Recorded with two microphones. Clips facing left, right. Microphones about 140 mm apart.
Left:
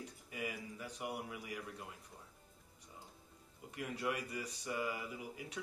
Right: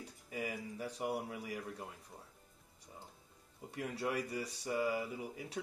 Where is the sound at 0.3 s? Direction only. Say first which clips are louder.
Right 3 dB; 35° right (ahead or behind).